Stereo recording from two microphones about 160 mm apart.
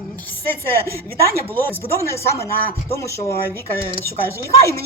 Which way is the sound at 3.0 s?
20° left (ahead or behind).